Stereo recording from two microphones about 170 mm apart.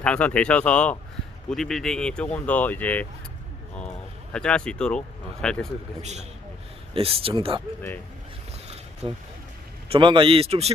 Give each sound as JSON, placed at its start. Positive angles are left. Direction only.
{"t": 0.0, "sound": "speech", "side_deg": 5}
{"t": 4.3, "sound": "speech", "side_deg": 5}
{"t": 6.0, "sound": "speech", "side_deg": -40}
{"t": 9.0, "sound": "speech", "side_deg": -30}